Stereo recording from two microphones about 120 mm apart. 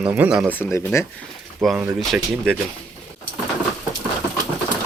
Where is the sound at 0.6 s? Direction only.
15° left (ahead or behind).